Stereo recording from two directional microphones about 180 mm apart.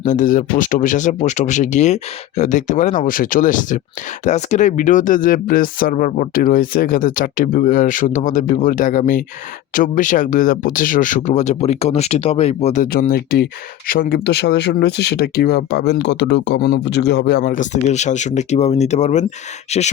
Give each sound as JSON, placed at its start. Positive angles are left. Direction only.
{"t": 0.0, "sound": "speech", "side_deg": 45}
{"t": 12.8, "sound": "speech", "side_deg": 55}